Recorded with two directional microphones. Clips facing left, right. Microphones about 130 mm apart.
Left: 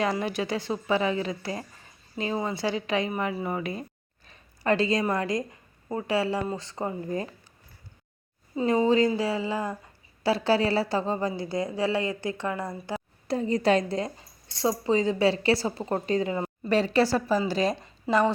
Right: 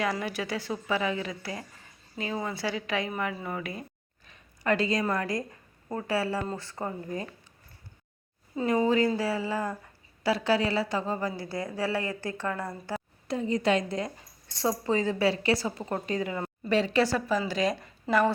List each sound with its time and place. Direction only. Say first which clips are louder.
0.0 s speech: left 3 dB; 25° left (ahead or behind)
4.3 s a sound: left 2 dB; 30° left (ahead or behind)
5.0 s speech: left 2 dB; 20° left (ahead or behind)
8.5 s speech: left 2 dB; 25° left (ahead or behind)
10.2 s speech: left 2 dB; 30° left (ahead or behind); by 13.0 s 15° left (ahead or behind)
13.2 s speech: left 3 dB; 35° left (ahead or behind)
16.6 s speech: left 2 dB; 40° left (ahead or behind)